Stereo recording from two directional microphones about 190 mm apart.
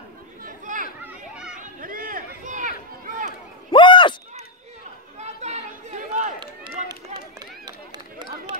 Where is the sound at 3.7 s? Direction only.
25° left (ahead or behind).